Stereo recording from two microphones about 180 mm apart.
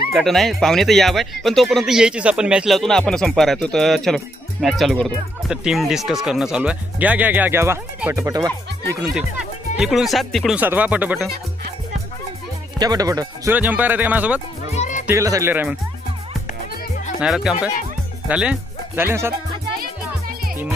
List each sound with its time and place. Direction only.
0.1 s speech: centre (ahead or behind); by 8.5 s 20° right (ahead or behind)
9.1 s speech: 5° right (ahead or behind)
12.7 s speech: 20° right (ahead or behind)
13.6 s speech: 10° right (ahead or behind)
14.8 s music: 45° left (ahead or behind)
15.0 s speech: 15° right (ahead or behind)
17.2 s speech: 5° right (ahead or behind)
19.8 s music: 55° right (ahead or behind)